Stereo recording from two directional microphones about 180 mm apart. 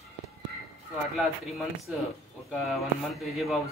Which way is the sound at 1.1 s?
Centre (ahead or behind).